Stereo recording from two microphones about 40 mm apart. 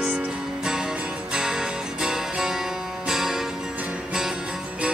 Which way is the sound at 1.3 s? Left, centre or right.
Centre.